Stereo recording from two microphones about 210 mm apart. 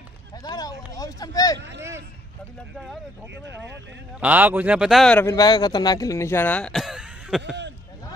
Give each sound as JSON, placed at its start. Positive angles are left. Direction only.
{"t": 0.4, "sound": "speech", "side_deg": 20}
{"t": 1.8, "sound": "speech", "side_deg": -10}
{"t": 4.2, "sound": "a man's voice", "side_deg": -10}